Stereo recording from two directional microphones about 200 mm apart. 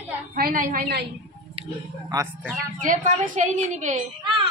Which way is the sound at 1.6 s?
30° right (ahead or behind).